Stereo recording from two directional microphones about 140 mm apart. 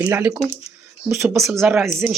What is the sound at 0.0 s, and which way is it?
Speech, 10° right (ahead or behind).